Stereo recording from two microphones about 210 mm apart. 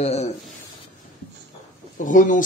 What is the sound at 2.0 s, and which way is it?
Speech, 40° left (ahead or behind).